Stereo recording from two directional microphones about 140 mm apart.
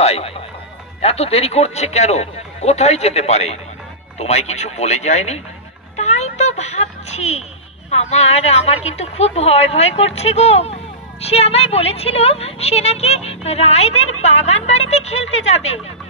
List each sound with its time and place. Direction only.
0.0 s a woman's voice: 45° left (ahead or behind)
5.9 s a sound: 55° left (ahead or behind)
8.0 s a woman's voice: 50° left (ahead or behind)